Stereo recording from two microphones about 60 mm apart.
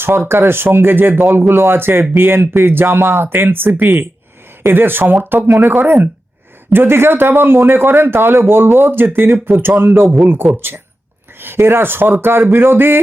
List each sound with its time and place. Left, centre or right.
0.0 s speech: right
3.3 s speech: right